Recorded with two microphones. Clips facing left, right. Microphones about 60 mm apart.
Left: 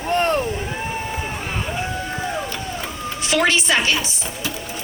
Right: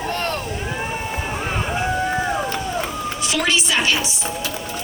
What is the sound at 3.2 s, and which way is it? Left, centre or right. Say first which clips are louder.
Speech: left 3 dB; left.